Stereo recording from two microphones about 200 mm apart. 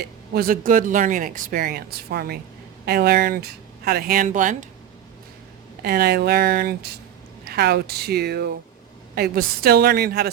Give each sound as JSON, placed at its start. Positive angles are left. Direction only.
{"t": 0.0, "sound": "speech", "side_deg": -45}
{"t": 5.8, "sound": "speech", "side_deg": -50}